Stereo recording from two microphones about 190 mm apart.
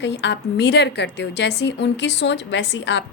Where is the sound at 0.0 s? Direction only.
70° left (ahead or behind).